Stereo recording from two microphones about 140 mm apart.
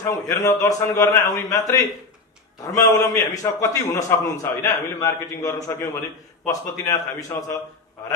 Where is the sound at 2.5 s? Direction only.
25° left (ahead or behind).